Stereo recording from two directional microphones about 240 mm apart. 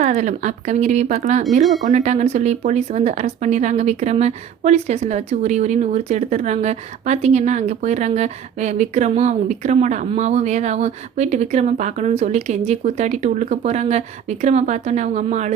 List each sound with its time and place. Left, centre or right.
0.0 s speech: right